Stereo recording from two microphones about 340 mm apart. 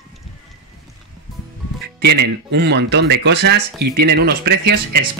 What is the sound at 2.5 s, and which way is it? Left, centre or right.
Speech, right.